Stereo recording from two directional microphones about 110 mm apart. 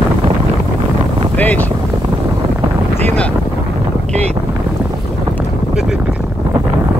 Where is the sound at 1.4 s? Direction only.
15° left (ahead or behind).